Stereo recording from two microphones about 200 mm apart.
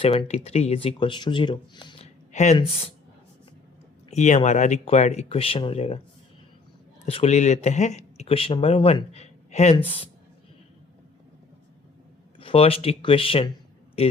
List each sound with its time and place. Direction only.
0.0 s speech: 30° left (ahead or behind)
2.3 s speech: 35° left (ahead or behind)
4.1 s speech: 35° left (ahead or behind)
7.0 s speech: 30° left (ahead or behind)
12.4 s a man's voice: 30° left (ahead or behind)